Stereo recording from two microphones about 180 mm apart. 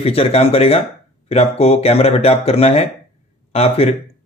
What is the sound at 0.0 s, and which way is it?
A man's voice, 30° left (ahead or behind).